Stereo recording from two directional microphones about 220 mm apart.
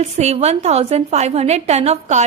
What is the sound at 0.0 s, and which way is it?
A woman's voice, 30° right (ahead or behind).